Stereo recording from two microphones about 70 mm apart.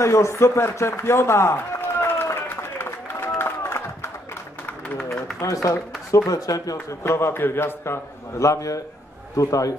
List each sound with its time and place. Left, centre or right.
0.0 s speech: left
2.3 s run: left
3.3 s crowd: left
4.9 s a man's voice: centre
5.4 s a man's voice: left
7.0 s a man's voice: left
8.4 s a man's voice: left